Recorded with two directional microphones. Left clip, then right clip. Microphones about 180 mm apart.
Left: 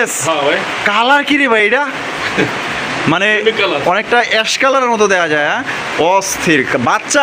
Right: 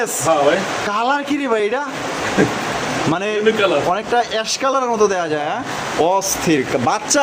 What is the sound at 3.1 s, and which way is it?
Speech, 10° left (ahead or behind).